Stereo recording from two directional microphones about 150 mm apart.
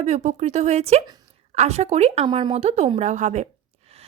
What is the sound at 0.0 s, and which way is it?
A woman's voice, 50° right (ahead or behind).